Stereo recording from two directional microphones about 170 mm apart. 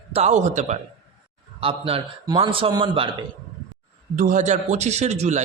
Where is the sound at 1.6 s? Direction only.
30° right (ahead or behind).